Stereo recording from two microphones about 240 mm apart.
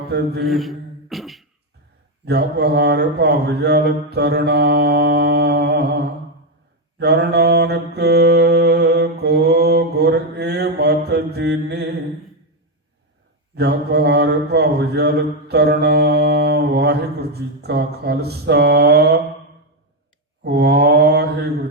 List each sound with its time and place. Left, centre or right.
0.1 s mantra: right
0.4 s beatboxing: centre
2.2 s mantra: right
7.0 s mantra: right
13.6 s mantra: right
20.4 s mantra: right